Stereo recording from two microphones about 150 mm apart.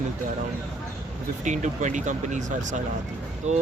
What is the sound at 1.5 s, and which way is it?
Speech, 55° right (ahead or behind).